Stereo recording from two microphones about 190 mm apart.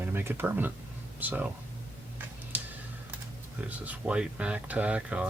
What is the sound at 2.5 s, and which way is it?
Computer keyboard, 10° right (ahead or behind).